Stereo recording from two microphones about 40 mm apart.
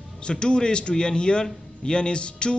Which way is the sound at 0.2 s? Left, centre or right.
Left.